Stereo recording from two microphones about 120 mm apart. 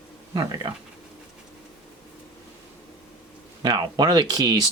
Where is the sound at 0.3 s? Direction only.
35° right (ahead or behind).